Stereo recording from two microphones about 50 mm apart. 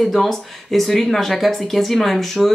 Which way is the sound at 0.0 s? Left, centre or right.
Centre.